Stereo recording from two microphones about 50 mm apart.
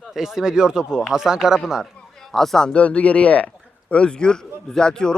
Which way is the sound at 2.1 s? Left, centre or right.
Centre.